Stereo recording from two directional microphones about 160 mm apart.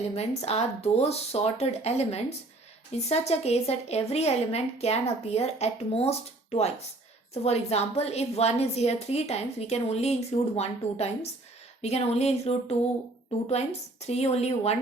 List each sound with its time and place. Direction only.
0.1 s a woman's voice: 40° left (ahead or behind)
14.0 s a woman's voice: 40° left (ahead or behind)